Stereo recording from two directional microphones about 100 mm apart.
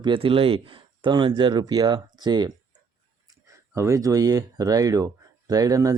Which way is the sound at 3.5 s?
30° right (ahead or behind).